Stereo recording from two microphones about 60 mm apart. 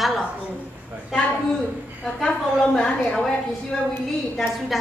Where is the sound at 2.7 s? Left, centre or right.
Centre.